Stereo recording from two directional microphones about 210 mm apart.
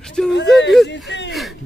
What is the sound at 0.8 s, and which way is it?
Speech, 55° left (ahead or behind).